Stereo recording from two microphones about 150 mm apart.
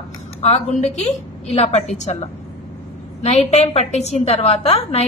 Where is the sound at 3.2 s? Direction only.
45° left (ahead or behind).